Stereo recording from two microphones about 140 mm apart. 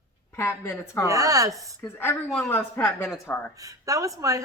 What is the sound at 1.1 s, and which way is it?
Speech, 25° right (ahead or behind).